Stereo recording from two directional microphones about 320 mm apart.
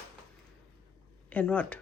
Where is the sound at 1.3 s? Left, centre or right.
Centre.